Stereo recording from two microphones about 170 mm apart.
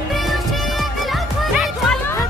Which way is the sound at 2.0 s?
15° left (ahead or behind).